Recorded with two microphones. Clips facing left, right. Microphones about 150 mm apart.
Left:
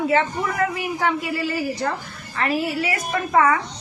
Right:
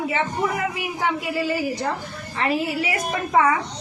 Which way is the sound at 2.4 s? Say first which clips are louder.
Even; 20° right (ahead or behind).